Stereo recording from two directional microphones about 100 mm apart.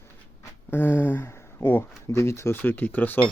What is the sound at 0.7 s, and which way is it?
Speech, 20° left (ahead or behind).